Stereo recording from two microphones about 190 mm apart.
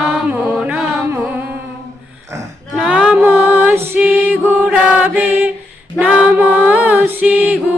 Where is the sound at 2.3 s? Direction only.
5° right (ahead or behind).